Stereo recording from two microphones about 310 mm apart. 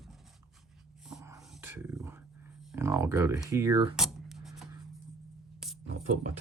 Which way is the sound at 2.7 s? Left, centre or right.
Centre.